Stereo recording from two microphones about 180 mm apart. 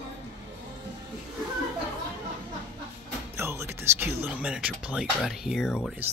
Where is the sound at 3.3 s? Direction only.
15° right (ahead or behind).